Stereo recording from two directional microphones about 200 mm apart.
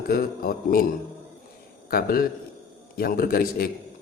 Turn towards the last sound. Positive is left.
turn(degrees=45)  # may be behind; listen again after turning